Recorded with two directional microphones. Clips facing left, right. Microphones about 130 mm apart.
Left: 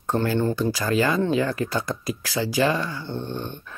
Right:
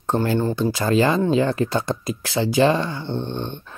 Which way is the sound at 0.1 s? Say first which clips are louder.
Right 2 dB; 20° right (ahead or behind).